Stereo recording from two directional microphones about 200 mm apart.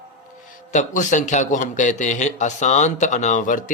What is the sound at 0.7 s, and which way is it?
A man's voice, 40° left (ahead or behind).